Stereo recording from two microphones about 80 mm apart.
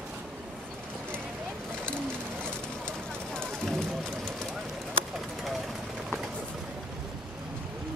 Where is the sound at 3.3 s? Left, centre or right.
Centre.